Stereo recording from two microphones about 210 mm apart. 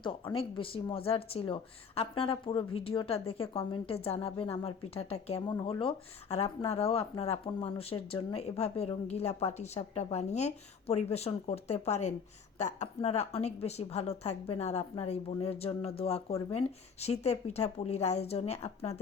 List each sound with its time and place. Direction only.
0.0 s speech: 25° left (ahead or behind)